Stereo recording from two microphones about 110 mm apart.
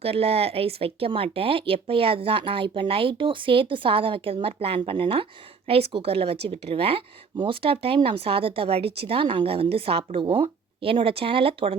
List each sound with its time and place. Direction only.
0.0 s speech: 60° right (ahead or behind)